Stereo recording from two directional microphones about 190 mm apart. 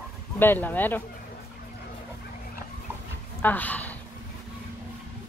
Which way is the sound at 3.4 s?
10° left (ahead or behind).